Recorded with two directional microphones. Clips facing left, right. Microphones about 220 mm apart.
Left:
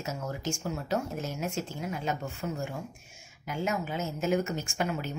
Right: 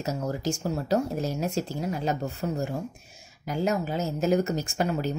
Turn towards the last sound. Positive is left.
turn(degrees=-35)  # may be behind; listen again after turning